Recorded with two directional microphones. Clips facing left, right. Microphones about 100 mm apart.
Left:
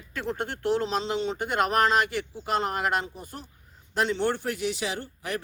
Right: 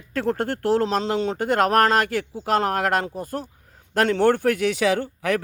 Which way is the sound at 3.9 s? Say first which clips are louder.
Right 7 dB; 55° right (ahead or behind).